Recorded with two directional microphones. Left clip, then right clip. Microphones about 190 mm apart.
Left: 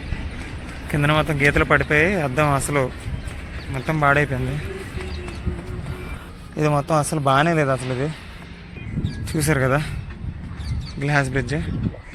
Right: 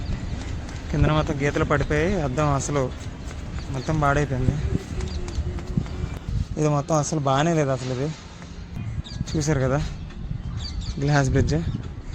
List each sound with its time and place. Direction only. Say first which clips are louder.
0.9 s speech: left 4 dB; centre (ahead or behind)
6.6 s speech: left 3 dB; centre (ahead or behind)
9.3 s speech: left 4 dB; centre (ahead or behind)
11.0 s speech: left 2 dB; 30° right (ahead or behind)